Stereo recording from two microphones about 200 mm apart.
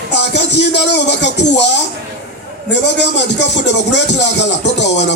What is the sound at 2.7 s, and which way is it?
A man's voice, 60° left (ahead or behind).